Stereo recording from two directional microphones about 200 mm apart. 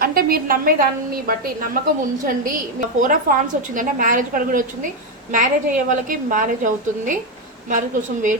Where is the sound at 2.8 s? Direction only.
40° right (ahead or behind).